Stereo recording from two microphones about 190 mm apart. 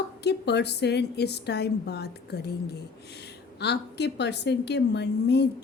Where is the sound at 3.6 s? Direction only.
60° left (ahead or behind).